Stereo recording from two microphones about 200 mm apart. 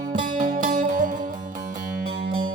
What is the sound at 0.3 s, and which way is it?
Music, 40° right (ahead or behind).